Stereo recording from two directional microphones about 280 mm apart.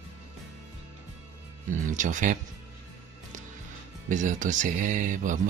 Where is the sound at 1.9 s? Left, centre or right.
Right.